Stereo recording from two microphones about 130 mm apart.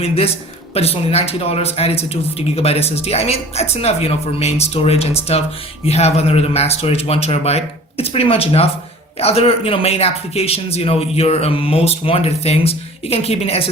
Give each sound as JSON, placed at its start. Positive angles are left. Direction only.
{"t": 0.7, "sound": "speech", "side_deg": 50}